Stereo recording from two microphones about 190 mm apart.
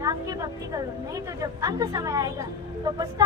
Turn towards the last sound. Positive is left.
turn(degrees=-20)  # may be behind; listen again after turning